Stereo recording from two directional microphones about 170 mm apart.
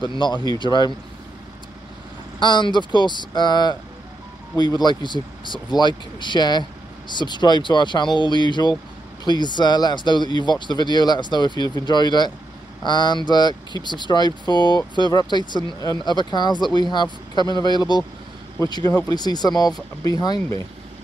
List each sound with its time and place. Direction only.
0.0 s speech: 25° left (ahead or behind)
2.4 s speech: 25° left (ahead or behind)